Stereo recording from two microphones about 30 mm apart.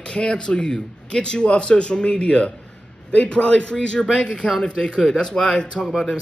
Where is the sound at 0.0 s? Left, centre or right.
Left.